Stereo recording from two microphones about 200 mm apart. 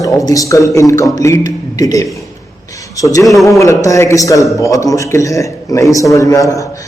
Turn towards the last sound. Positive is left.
turn(degrees=15)  # may be behind; listen again after turning